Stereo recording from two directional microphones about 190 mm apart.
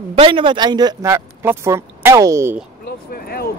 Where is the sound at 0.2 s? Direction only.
25° right (ahead or behind).